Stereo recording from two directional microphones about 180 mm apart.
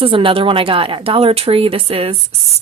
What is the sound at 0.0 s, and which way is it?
Speech, 30° right (ahead or behind).